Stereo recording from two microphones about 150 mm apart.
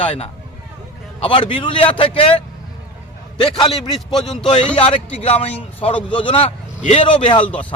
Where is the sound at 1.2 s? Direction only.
35° left (ahead or behind).